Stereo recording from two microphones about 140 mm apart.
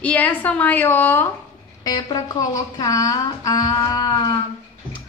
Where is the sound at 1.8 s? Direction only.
25° left (ahead or behind).